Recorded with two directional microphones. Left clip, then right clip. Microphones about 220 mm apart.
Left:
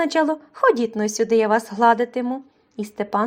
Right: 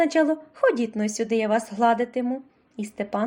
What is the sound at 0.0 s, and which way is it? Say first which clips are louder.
A woman's voice: left 1 dB; 15° left (ahead or behind).